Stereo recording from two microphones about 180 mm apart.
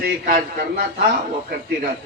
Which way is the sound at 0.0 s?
60° right (ahead or behind).